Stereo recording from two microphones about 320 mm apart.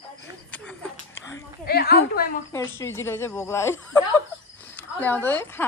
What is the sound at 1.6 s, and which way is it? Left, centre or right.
Speech, left.